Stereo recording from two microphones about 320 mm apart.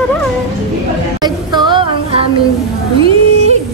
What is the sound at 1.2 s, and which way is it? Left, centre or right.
Music, centre.